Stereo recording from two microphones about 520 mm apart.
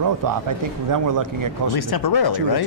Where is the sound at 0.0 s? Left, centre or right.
Right.